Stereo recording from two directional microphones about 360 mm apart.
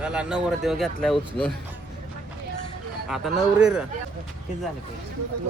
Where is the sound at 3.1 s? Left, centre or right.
Centre.